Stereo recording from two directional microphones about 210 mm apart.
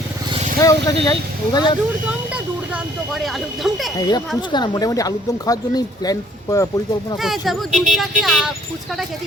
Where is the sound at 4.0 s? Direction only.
20° left (ahead or behind).